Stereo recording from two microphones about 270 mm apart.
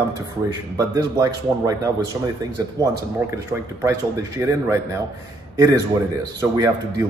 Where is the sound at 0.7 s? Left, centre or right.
Centre.